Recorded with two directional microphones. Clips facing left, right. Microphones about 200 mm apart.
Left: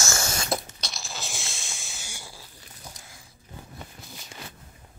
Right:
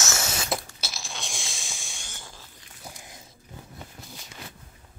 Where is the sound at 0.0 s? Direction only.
5° right (ahead or behind).